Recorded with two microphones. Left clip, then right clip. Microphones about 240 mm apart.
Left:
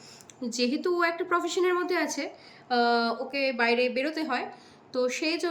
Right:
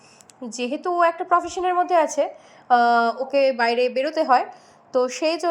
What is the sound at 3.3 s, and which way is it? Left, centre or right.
Speech, right.